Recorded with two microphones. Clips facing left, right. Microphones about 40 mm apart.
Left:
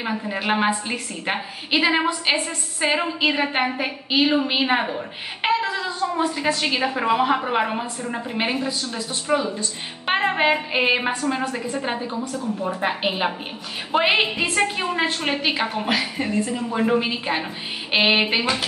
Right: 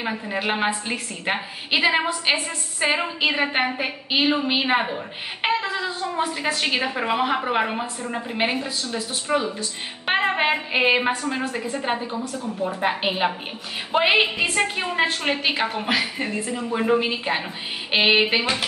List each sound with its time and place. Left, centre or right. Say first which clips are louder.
0.0 s a woman's voice: even; centre
6.8 s a woman's voice: left 3 dB; centre